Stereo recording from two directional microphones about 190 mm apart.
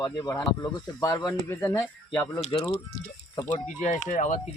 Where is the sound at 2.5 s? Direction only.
25° left (ahead or behind).